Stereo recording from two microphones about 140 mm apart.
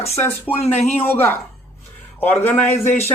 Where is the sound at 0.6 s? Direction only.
50° left (ahead or behind).